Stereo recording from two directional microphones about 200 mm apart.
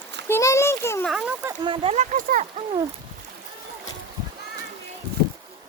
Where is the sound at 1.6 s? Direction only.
25° right (ahead or behind).